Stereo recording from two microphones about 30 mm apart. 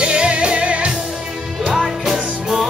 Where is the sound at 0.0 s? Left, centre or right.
Right.